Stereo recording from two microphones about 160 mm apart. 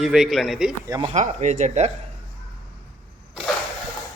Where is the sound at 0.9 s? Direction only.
25° right (ahead or behind).